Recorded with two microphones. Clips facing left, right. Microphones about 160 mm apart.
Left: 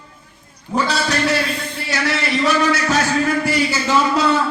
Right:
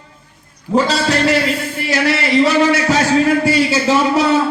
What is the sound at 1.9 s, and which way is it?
Speech, 25° right (ahead or behind).